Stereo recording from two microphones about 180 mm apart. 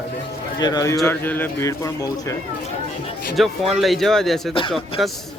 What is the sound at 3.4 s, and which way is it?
Speech, centre (ahead or behind).